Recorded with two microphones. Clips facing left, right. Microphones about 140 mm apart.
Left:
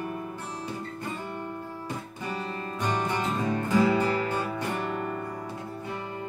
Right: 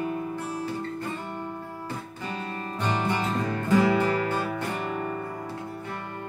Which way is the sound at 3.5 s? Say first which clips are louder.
Right 1 dB; 15° left (ahead or behind).